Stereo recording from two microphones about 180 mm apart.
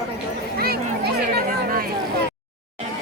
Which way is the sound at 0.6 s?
60° right (ahead or behind).